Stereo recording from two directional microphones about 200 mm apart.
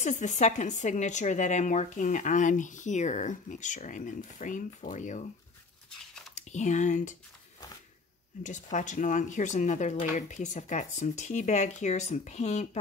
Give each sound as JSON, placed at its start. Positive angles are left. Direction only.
{"t": 0.0, "sound": "speech", "side_deg": 35}
{"t": 6.3, "sound": "speech", "side_deg": 35}
{"t": 8.4, "sound": "speech", "side_deg": 40}